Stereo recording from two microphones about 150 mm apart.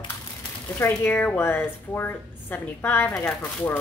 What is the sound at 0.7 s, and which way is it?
A woman's voice, 10° left (ahead or behind).